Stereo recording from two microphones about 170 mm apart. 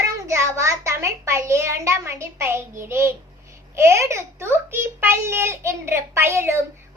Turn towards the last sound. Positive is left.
turn(degrees=-15)  # may be behind; listen again after turning